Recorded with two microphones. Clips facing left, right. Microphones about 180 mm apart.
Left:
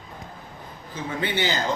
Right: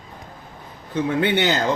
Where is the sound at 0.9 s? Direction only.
65° right (ahead or behind).